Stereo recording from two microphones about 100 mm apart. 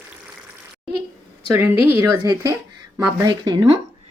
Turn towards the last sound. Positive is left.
turn(degrees=-45)  # may be behind; listen again after turning